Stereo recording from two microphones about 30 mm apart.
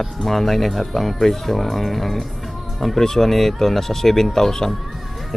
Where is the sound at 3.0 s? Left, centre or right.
Centre.